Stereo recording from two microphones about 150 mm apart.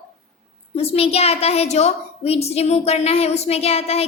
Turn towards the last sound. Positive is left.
turn(degrees=45)  # may be behind; listen again after turning